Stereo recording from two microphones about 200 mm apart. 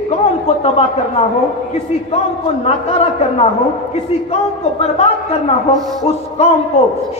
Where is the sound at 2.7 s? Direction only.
30° left (ahead or behind).